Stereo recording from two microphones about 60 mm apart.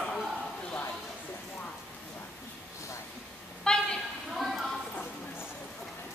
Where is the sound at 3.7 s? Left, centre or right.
Centre.